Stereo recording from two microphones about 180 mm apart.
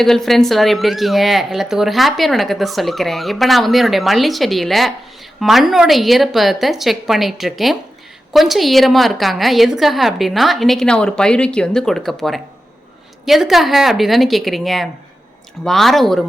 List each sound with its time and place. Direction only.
0.0 s speech: centre (ahead or behind)